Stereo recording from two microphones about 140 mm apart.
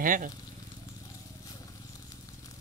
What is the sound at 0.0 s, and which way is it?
Speech, 75° right (ahead or behind).